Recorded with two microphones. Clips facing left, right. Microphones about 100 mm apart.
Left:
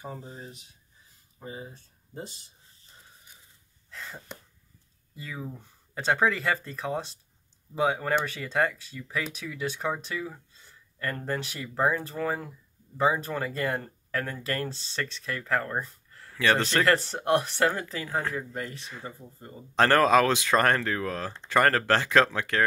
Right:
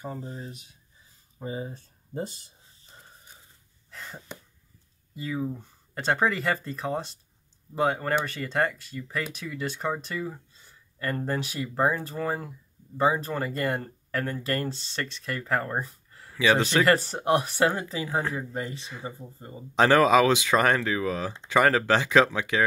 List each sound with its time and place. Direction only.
0.0 s speech: 5° left (ahead or behind)
1.4 s speech: 25° right (ahead or behind)
1.7 s speech: 45° right (ahead or behind)
3.9 s a sound: 5° right (ahead or behind)
5.1 s speech: 5° right (ahead or behind)